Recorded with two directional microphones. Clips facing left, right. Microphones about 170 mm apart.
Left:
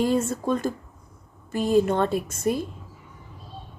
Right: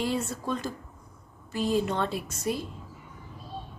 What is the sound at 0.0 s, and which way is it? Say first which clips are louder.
Speech: left 7 dB; 45° left (ahead or behind).